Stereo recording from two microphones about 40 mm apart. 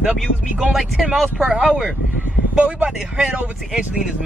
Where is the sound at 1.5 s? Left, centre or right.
Right.